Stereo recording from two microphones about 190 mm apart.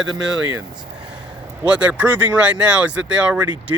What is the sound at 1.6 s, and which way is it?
Speech, 5° right (ahead or behind).